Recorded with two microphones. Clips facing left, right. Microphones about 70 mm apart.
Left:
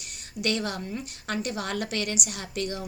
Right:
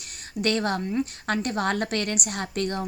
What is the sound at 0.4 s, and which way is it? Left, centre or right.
A woman's voice, right.